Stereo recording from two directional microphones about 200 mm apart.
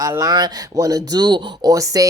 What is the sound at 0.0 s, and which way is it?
Speech, 15° right (ahead or behind).